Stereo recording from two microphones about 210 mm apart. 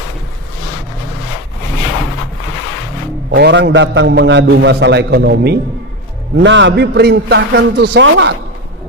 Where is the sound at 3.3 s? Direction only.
55° right (ahead or behind).